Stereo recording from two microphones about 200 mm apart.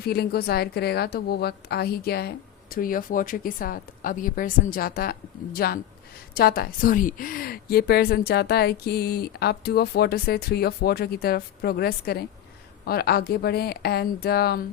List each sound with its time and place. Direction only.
0.0 s a woman's voice: 50° left (ahead or behind)